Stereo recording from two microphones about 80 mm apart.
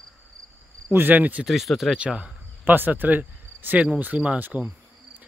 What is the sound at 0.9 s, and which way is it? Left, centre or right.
Speech, right.